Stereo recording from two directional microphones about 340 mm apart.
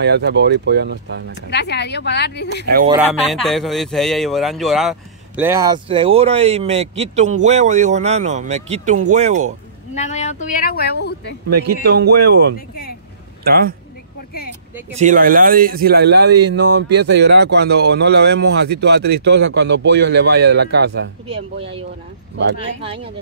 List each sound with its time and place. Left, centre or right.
0.0 s speech: right
1.3 s speech: left
2.6 s speech: right
2.9 s a man's voice: centre
9.9 s speech: centre
11.6 s speech: right
12.5 s speech: left
13.4 s a man's voice: right
15.0 s a man's voice: right
21.5 s a man's voice: centre